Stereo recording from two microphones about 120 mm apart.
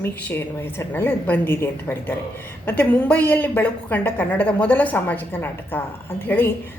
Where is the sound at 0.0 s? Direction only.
20° left (ahead or behind).